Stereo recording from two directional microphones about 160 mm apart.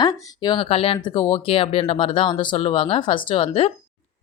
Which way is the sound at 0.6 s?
40° left (ahead or behind).